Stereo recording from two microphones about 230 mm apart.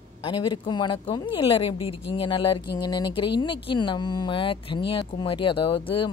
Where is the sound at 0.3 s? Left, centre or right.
Centre.